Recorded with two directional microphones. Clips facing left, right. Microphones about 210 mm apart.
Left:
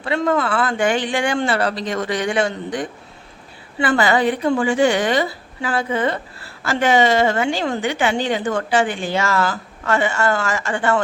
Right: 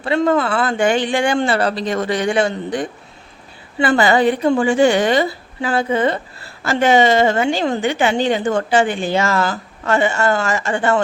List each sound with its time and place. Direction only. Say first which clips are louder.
0.0 s a woman's voice: right 3 dB; 30° right (ahead or behind)